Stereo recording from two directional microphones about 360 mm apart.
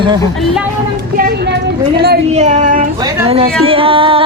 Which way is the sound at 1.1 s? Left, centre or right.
Right.